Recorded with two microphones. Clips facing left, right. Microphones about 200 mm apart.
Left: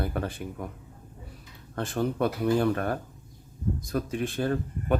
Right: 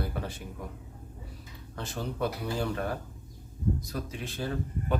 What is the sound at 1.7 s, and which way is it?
Speech, 55° left (ahead or behind).